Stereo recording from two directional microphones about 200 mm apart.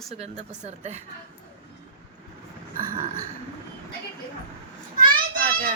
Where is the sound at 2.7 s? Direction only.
45° right (ahead or behind).